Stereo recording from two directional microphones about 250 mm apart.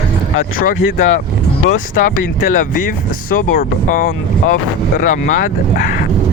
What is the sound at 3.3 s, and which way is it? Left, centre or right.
Speech, left.